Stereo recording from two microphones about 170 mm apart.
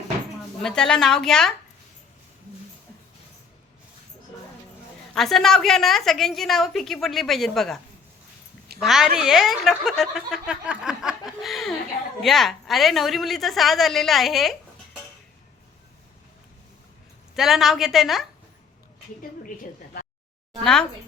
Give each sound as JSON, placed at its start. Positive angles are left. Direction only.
{"t": 0.6, "sound": "a woman's voice", "side_deg": 5}
{"t": 5.1, "sound": "a woman's voice", "side_deg": 0}
{"t": 8.8, "sound": "a woman's voice", "side_deg": 0}
{"t": 17.3, "sound": "a woman's voice", "side_deg": 0}
{"t": 19.4, "sound": "a woman's voice", "side_deg": 55}